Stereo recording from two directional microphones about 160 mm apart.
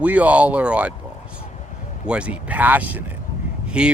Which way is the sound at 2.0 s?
5° right (ahead or behind).